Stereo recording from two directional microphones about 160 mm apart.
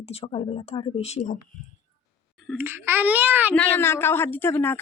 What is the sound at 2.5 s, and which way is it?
Speech, 15° right (ahead or behind).